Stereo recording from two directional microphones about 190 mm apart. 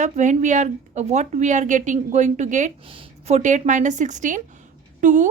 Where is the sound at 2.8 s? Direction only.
30° right (ahead or behind).